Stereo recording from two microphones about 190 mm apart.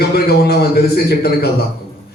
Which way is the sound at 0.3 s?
55° left (ahead or behind).